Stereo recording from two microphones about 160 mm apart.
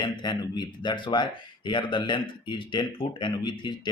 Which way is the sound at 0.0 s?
25° left (ahead or behind).